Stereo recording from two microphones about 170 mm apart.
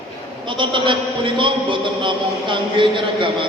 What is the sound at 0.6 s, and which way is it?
A man's voice, 30° right (ahead or behind).